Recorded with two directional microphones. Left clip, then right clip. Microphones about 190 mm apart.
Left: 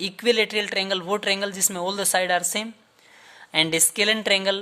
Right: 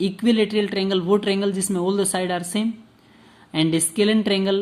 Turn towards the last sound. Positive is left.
turn(degrees=40)  # may be behind; listen again after turning